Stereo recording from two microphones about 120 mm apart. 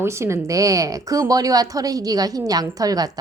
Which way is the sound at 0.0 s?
25° right (ahead or behind).